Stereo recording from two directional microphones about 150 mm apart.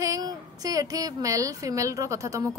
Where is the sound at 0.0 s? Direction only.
25° right (ahead or behind).